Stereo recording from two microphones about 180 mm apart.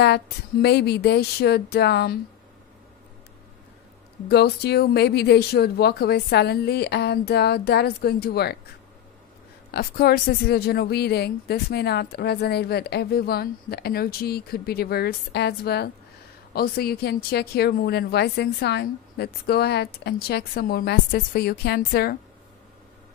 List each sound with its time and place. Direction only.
0.0 s a woman's voice: 70° left (ahead or behind)
4.3 s a woman's voice: 65° left (ahead or behind)
9.7 s a woman's voice: 60° left (ahead or behind)